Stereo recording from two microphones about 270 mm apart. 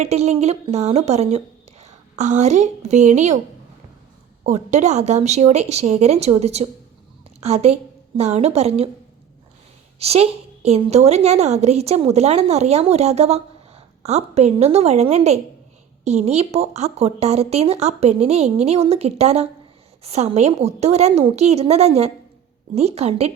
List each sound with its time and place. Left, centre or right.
0.0 s a woman's voice: right
4.4 s a woman's voice: right
10.0 s a woman's voice: right